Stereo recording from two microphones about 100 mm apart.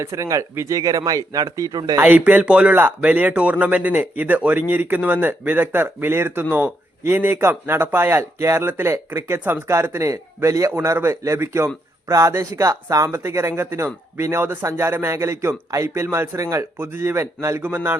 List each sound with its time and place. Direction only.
0.0 s speech: 30° right (ahead or behind)
2.0 s speech: 15° right (ahead or behind)